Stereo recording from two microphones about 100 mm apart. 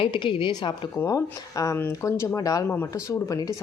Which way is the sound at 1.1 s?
35° left (ahead or behind).